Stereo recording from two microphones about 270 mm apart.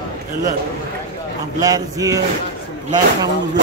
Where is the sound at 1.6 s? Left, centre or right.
Centre.